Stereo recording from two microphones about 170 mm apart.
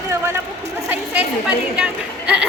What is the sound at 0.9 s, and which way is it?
A woman's voice, 5° right (ahead or behind).